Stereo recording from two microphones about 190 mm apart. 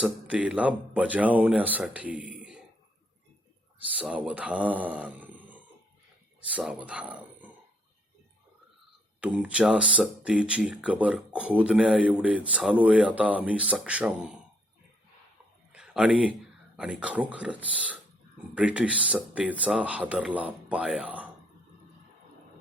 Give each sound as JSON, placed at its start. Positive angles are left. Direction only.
{"t": 0.0, "sound": "speech", "side_deg": -5}
{"t": 3.9, "sound": "speech", "side_deg": -5}
{"t": 9.2, "sound": "speech", "side_deg": -5}
{"t": 15.7, "sound": "a sound", "side_deg": -5}
{"t": 16.7, "sound": "speech", "side_deg": -5}